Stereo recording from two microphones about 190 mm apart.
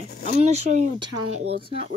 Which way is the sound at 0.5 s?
35° right (ahead or behind).